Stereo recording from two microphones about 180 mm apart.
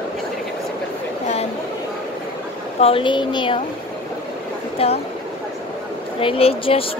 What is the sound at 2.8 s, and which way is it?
Speech, 30° left (ahead or behind).